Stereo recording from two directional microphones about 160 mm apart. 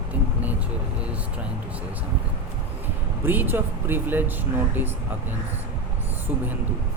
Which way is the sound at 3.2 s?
10° right (ahead or behind).